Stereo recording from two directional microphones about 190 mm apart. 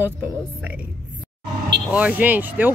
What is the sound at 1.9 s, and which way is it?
Speech, 5° right (ahead or behind).